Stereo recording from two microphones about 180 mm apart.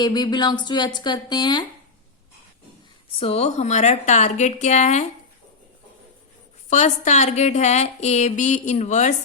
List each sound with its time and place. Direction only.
0.0 s speech: 25° left (ahead or behind)
3.2 s a woman's voice: 35° left (ahead or behind)
6.7 s a woman's voice: 40° left (ahead or behind)